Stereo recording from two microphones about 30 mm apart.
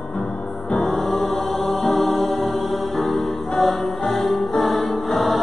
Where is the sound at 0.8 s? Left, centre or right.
Centre.